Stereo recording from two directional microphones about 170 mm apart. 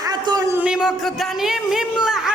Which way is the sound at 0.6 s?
5° right (ahead or behind).